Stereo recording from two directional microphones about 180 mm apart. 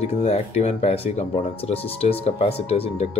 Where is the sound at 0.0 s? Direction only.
35° left (ahead or behind).